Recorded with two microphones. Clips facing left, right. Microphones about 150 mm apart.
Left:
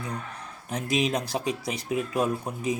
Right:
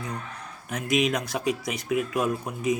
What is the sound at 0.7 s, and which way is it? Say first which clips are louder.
A man's voice: right 1 dB; 30° left (ahead or behind).